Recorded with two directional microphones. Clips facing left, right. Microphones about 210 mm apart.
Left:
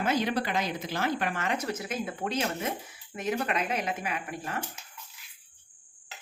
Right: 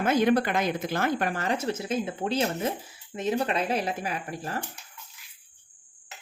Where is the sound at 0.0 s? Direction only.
50° right (ahead or behind).